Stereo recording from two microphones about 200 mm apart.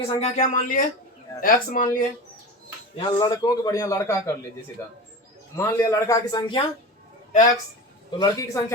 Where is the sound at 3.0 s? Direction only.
20° left (ahead or behind).